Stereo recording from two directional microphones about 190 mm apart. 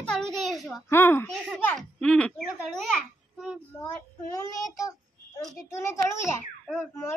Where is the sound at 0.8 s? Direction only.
10° left (ahead or behind).